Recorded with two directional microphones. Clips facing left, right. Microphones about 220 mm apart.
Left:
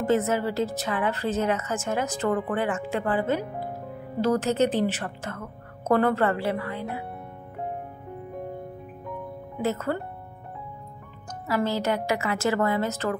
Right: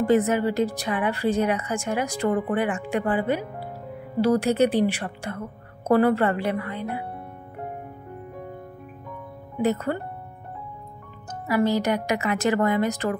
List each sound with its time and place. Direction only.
0.0 s a woman's voice: 15° right (ahead or behind)
4.4 s a woman's voice: 10° right (ahead or behind)
9.6 s speech: 15° right (ahead or behind)
11.4 s a woman's voice: 15° right (ahead or behind)